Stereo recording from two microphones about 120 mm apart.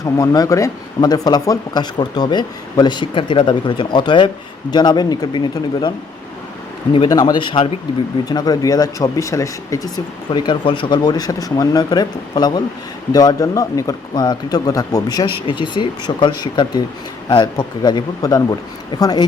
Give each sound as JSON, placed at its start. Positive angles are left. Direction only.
{"t": 0.0, "sound": "speech", "side_deg": 30}
{"t": 7.1, "sound": "speech", "side_deg": 30}
{"t": 8.2, "sound": "speech", "side_deg": 35}
{"t": 10.2, "sound": "speech", "side_deg": 40}